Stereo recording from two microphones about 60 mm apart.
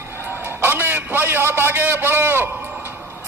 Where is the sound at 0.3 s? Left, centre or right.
Right.